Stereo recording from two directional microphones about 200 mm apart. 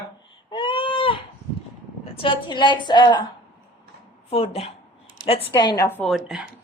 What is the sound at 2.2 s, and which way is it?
A woman's voice, 25° left (ahead or behind).